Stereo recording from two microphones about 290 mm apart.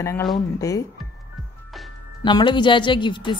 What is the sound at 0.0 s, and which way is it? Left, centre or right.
Speech, centre.